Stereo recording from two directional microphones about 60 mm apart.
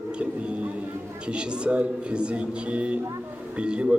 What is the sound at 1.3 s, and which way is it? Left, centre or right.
A man's voice, centre.